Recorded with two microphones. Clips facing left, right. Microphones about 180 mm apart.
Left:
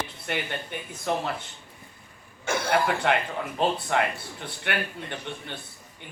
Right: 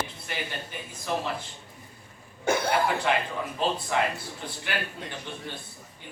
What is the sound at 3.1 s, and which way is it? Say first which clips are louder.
A man's voice: left 2 dB; 60° left (ahead or behind).